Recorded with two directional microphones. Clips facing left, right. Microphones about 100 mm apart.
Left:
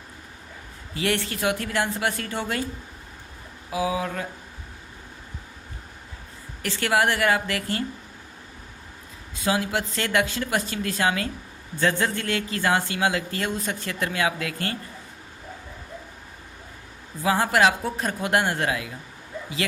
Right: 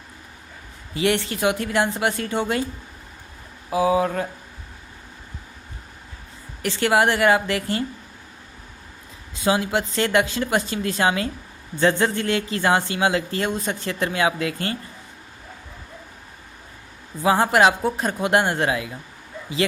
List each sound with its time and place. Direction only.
0.9 s a woman's voice: 20° right (ahead or behind)
3.7 s speech: 40° right (ahead or behind)
6.6 s a woman's voice: 20° right (ahead or behind)
9.4 s a woman's voice: 25° right (ahead or behind)
17.2 s a woman's voice: 25° right (ahead or behind)